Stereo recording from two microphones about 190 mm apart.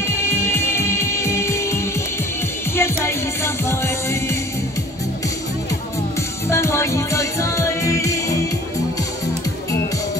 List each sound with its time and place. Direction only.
0.0 s music: 15° left (ahead or behind)
6.5 s music: 15° left (ahead or behind)